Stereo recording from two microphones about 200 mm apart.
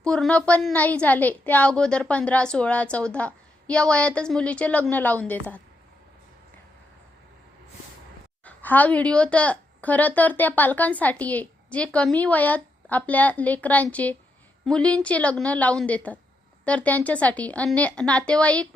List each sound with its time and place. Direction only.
0.0 s a woman's voice: 5° left (ahead or behind)
8.4 s a woman's voice: 10° left (ahead or behind)